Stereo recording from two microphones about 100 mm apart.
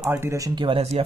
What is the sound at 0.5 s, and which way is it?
Speech, 65° right (ahead or behind).